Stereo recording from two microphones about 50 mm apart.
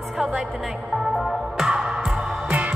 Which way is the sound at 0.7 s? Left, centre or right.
Centre.